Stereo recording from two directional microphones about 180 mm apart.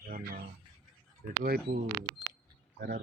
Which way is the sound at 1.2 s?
55° right (ahead or behind).